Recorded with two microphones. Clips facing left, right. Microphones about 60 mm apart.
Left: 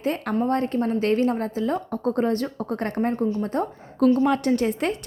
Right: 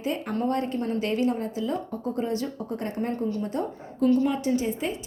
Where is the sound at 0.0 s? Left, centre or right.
Left.